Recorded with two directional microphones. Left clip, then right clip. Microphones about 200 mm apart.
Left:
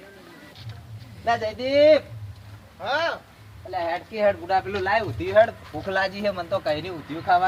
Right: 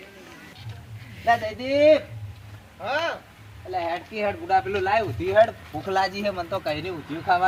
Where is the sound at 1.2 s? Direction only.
5° left (ahead or behind).